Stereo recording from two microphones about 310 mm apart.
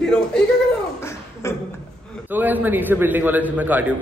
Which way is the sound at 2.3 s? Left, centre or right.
Centre.